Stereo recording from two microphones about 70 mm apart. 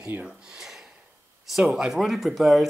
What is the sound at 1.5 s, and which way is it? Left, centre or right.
Speech, centre.